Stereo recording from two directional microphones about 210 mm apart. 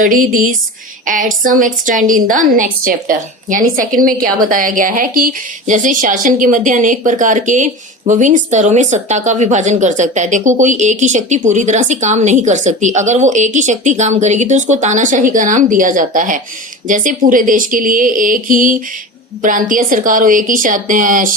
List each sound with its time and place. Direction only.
0.0 s a woman's voice: 40° right (ahead or behind)